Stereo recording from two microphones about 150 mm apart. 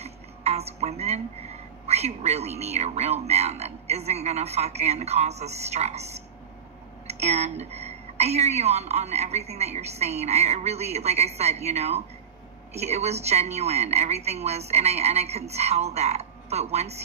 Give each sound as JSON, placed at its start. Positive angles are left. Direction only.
{"t": 0.0, "sound": "a woman's voice", "side_deg": -45}